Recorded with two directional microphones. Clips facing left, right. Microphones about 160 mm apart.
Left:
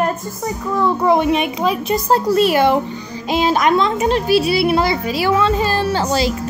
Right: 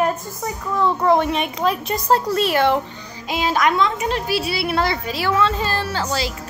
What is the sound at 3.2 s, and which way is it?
A woman's voice, 25° left (ahead or behind).